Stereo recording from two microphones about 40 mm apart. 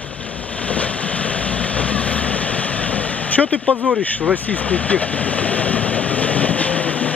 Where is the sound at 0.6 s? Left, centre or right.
Left.